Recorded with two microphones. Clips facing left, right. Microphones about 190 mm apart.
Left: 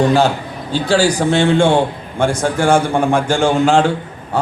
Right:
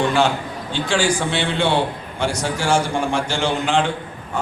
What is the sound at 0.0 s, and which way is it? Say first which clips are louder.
A man's voice: left 5 dB; 40° left (ahead or behind).